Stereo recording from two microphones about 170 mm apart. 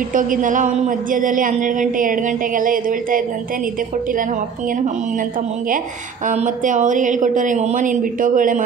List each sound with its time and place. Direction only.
0.1 s speech: 50° right (ahead or behind)
6.2 s speech: 50° right (ahead or behind)